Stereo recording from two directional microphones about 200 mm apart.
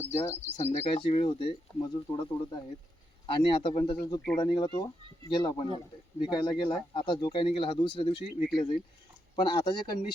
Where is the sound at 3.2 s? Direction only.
25° left (ahead or behind).